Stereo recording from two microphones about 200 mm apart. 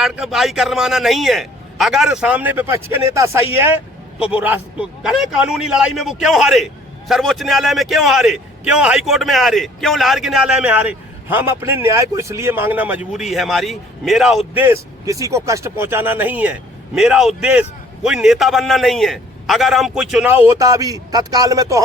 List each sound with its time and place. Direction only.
0.0 s a man's voice: centre (ahead or behind)